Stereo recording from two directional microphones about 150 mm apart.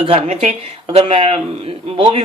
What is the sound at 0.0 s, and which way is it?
Speech, 40° right (ahead or behind).